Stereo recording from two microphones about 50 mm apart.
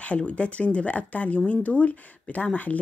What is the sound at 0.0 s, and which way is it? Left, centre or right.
Speech, left.